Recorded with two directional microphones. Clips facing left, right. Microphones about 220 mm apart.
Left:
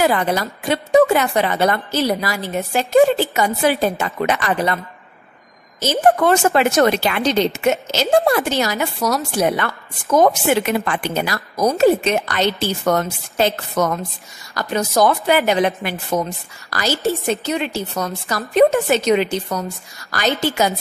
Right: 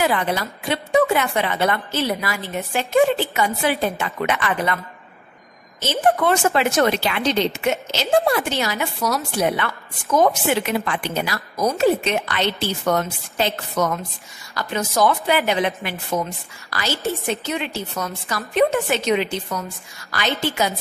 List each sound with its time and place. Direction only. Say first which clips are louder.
0.0 s a woman's voice: left 3 dB; 40° left (ahead or behind)
6.2 s a woman's voice: left 3 dB; 45° left (ahead or behind)